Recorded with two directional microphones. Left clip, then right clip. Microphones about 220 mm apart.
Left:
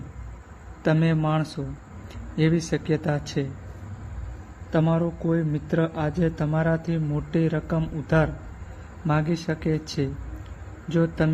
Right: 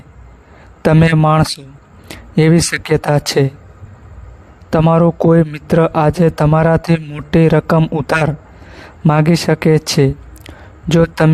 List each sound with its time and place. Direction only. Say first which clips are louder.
0.8 s a man's voice: right 12 dB; 45° right (ahead or behind)
4.7 s a man's voice: right 13 dB; 45° right (ahead or behind)